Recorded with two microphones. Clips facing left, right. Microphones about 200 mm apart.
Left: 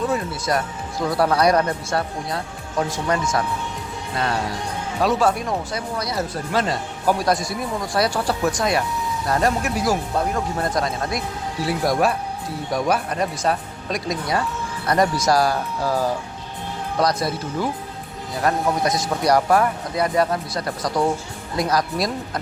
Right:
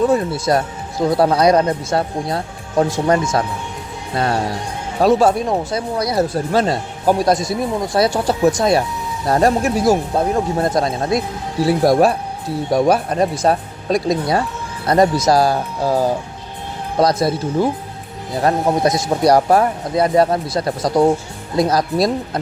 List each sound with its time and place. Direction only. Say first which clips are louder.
0.1 s speech: right 7 dB; 30° right (ahead or behind)
2.3 s speech: right 7 dB; 30° right (ahead or behind)